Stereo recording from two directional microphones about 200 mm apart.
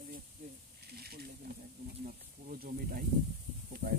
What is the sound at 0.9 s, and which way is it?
Snake, 50° right (ahead or behind).